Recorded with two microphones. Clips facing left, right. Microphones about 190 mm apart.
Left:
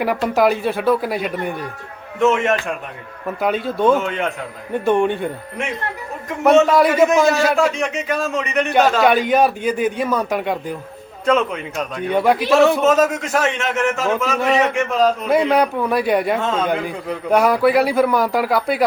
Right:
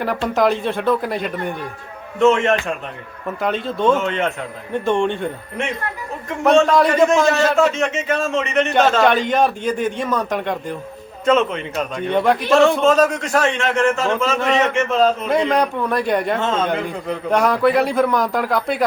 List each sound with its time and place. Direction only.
0.0 s a man's voice: 10° left (ahead or behind)
13.2 s a man's voice: 20° left (ahead or behind)
14.0 s a man's voice: 5° left (ahead or behind)